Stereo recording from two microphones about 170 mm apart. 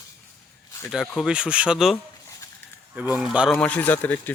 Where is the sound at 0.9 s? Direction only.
Centre (ahead or behind).